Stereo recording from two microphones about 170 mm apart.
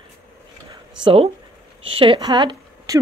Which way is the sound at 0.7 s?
30° right (ahead or behind).